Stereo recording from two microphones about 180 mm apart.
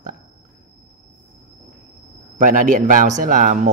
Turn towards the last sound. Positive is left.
turn(degrees=-45)  # may be behind; listen again after turning